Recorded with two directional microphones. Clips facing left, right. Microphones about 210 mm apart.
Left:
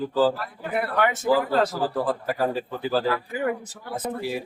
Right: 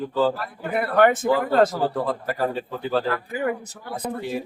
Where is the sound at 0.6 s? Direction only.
50° right (ahead or behind).